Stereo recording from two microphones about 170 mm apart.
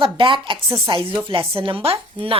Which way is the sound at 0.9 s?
30° right (ahead or behind).